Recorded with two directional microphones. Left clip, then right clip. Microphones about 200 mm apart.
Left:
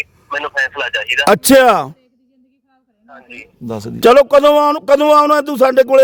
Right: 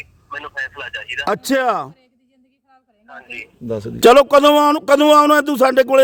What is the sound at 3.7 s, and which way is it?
Speech, 55° left (ahead or behind).